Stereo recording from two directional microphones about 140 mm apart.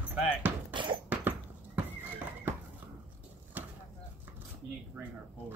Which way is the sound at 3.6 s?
10° right (ahead or behind).